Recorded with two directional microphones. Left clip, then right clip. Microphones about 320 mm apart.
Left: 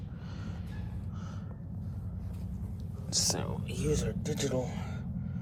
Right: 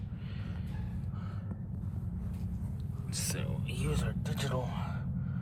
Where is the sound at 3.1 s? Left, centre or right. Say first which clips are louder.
Left 8 dB; centre.